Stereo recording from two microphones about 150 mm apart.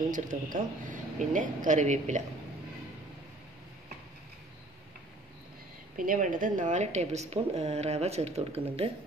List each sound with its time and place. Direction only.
0.1 s speech: 60° right (ahead or behind)
5.9 s a woman's voice: 60° right (ahead or behind); by 8.9 s 40° right (ahead or behind)